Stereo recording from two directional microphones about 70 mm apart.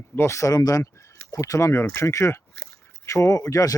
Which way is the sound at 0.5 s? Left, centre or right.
Left.